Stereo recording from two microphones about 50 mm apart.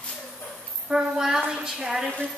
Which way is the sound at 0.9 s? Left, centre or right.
Centre.